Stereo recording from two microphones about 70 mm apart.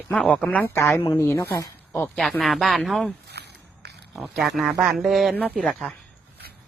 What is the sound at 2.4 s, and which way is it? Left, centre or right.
Speech, centre.